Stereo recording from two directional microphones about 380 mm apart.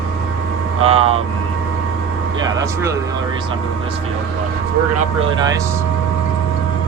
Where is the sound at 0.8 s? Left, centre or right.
Centre.